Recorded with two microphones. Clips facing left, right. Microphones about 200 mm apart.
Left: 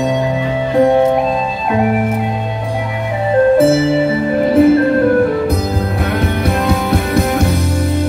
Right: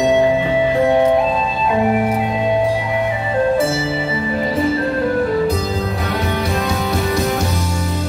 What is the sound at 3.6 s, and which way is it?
Music, 55° left (ahead or behind).